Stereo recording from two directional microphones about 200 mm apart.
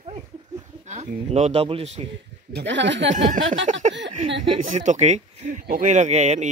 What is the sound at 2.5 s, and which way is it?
Speech, 60° right (ahead or behind).